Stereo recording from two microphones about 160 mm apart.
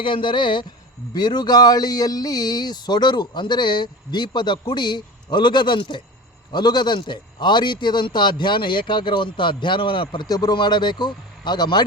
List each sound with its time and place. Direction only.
0.0 s a man's voice: 30° left (ahead or behind)